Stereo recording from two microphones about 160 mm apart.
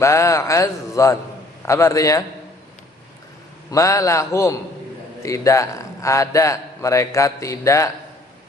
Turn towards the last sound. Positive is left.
turn(degrees=20)  # may be behind; listen again after turning